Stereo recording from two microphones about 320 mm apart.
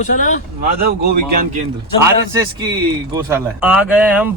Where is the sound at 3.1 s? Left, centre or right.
Centre.